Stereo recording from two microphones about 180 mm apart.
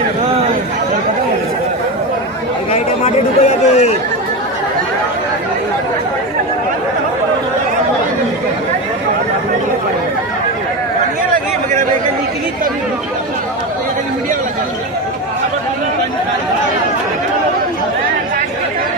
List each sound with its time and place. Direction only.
2.7 s chatter: 40° left (ahead or behind)